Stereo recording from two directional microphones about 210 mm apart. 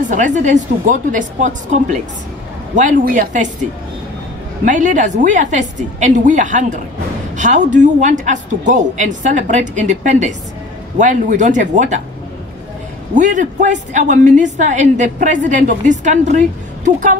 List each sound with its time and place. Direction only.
0.1 s a woman's voice: 35° right (ahead or behind)
4.6 s a woman's voice: 40° right (ahead or behind)
13.1 s a woman's voice: 35° right (ahead or behind)